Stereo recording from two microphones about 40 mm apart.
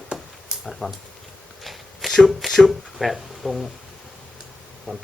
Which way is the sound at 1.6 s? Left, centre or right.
Centre.